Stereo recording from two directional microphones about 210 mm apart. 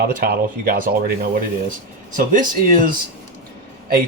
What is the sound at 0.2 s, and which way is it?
Speech, 45° right (ahead or behind).